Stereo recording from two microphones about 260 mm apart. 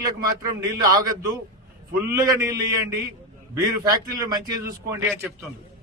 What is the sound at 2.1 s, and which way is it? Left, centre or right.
A man's voice, centre.